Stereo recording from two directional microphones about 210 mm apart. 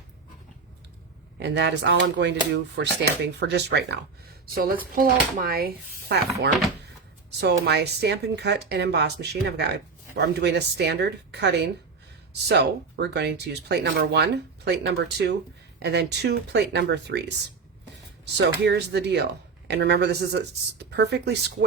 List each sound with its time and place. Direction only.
1.4 s speech: 55° right (ahead or behind)
4.5 s speech: 45° right (ahead or behind)